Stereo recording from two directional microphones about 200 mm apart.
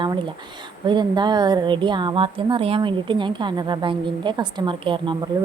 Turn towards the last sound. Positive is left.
turn(degrees=-25)  # may be behind; listen again after turning